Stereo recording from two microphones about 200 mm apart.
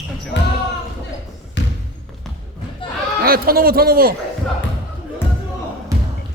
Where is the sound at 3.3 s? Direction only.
50° right (ahead or behind).